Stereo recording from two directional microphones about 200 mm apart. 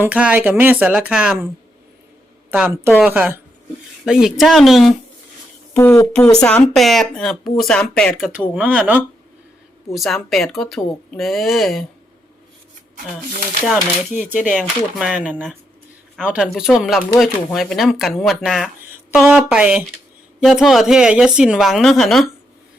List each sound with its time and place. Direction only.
0.0 s speech: 5° right (ahead or behind)
2.5 s speech: 10° right (ahead or behind)
5.7 s speech: 10° left (ahead or behind)
13.7 s speech: 5° right (ahead or behind)